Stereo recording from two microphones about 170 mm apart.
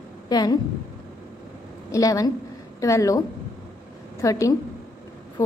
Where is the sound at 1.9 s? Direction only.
20° left (ahead or behind).